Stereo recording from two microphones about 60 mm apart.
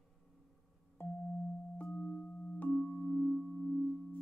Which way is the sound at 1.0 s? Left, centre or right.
Left.